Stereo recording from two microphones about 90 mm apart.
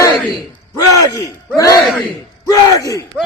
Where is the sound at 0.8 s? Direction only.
40° left (ahead or behind).